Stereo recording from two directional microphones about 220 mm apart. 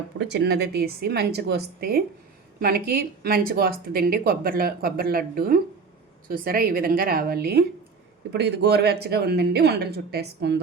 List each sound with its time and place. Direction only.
0.2 s speech: 50° right (ahead or behind)